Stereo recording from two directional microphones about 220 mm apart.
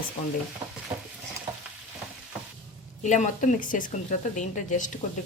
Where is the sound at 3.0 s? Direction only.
35° left (ahead or behind).